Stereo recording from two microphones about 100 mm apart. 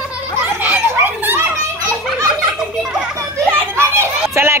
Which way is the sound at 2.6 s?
5° right (ahead or behind).